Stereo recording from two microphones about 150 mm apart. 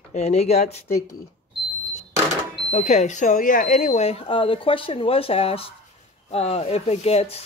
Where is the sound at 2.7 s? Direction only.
50° left (ahead or behind).